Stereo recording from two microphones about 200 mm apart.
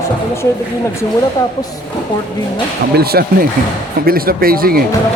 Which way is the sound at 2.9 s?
50° right (ahead or behind).